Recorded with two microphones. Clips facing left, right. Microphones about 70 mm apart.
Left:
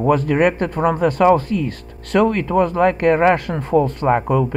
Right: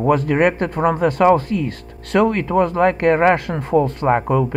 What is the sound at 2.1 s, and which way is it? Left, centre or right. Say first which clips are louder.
Speech: even; right.